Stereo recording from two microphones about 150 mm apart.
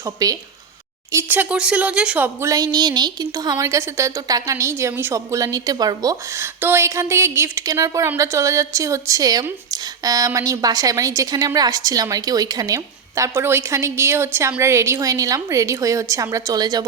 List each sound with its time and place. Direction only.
0.0 s speech: 25° right (ahead or behind)
1.1 s speech: 10° right (ahead or behind)